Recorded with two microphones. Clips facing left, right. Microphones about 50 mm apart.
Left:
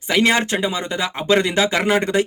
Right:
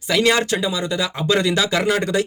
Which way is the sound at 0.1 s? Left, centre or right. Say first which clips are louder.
Even; left.